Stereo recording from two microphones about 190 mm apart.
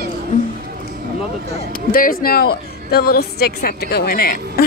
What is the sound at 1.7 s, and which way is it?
A woman's voice, 50° left (ahead or behind).